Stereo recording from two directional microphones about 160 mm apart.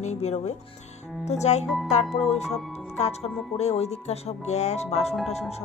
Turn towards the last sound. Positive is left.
turn(degrees=40)  # may be behind; listen again after turning